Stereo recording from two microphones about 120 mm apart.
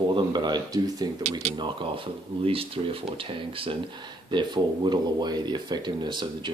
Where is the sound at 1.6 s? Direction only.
45° right (ahead or behind).